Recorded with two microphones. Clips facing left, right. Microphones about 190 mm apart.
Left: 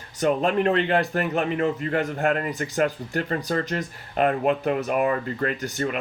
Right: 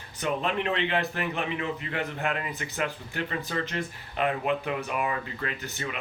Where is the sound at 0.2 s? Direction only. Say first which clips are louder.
Left 7 dB; 45° left (ahead or behind).